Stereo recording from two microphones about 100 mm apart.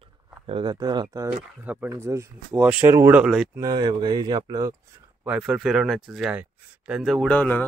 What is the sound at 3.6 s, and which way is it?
Speech, 45° right (ahead or behind).